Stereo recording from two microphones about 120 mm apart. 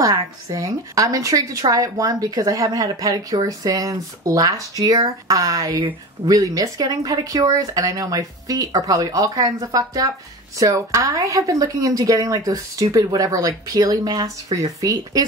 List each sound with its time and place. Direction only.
0.0 s a woman's voice: 30° right (ahead or behind)
5.8 s speech: 45° right (ahead or behind)
6.3 s a woman's voice: 30° right (ahead or behind)